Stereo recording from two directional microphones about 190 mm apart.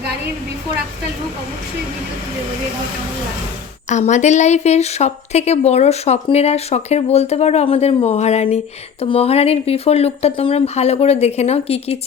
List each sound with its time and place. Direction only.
3.8 s speech: 40° left (ahead or behind)